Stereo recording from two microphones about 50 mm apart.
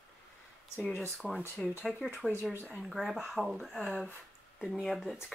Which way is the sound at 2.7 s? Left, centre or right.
Centre.